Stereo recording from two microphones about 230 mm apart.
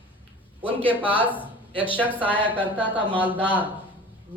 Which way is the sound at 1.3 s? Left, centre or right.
Left.